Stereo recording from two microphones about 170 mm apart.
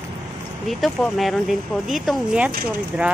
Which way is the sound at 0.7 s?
Centre (ahead or behind).